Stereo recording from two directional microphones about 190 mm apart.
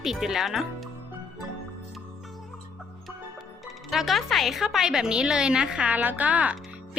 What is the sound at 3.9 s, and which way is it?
A woman's voice, centre (ahead or behind).